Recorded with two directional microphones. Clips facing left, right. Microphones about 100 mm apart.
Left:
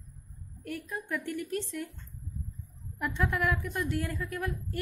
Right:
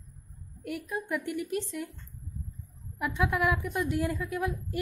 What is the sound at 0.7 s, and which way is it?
A woman's voice, 10° right (ahead or behind).